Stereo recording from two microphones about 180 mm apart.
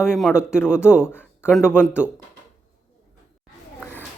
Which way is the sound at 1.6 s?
10° left (ahead or behind).